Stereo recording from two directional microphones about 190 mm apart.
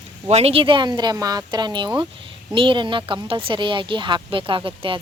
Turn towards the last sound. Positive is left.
turn(degrees=-25)  # may be behind; listen again after turning